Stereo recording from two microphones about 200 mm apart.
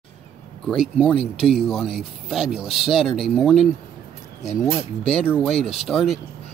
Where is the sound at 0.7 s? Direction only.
5° left (ahead or behind).